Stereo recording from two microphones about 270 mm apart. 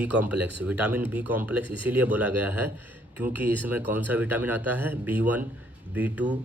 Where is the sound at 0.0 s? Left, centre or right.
Centre.